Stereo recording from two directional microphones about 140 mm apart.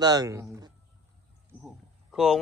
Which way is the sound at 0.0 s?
25° right (ahead or behind).